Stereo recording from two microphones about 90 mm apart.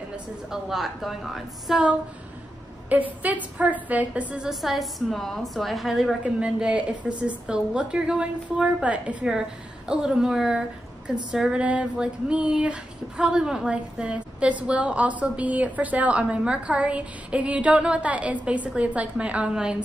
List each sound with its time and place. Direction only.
0.1 s a woman's voice: 5° right (ahead or behind)
2.9 s a woman's voice: 15° right (ahead or behind)
4.5 s a woman's voice: centre (ahead or behind)
6.2 s a woman's voice: 10° right (ahead or behind)